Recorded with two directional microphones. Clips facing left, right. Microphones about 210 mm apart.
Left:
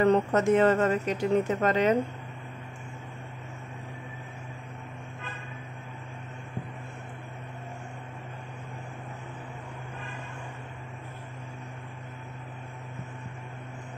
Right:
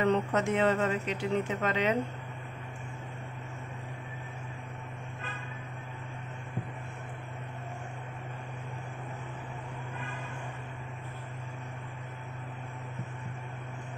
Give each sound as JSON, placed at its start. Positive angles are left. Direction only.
{"t": 0.0, "sound": "speech", "side_deg": 40}